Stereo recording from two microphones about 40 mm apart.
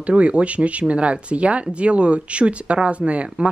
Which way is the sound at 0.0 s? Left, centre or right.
Right.